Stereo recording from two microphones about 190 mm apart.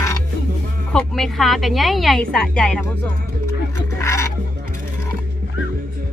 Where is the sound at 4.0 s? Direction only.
15° left (ahead or behind).